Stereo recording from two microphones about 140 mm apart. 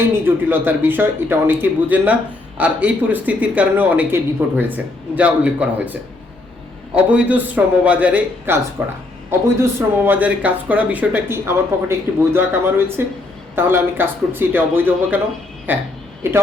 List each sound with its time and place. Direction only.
0.3 s speech: 15° right (ahead or behind)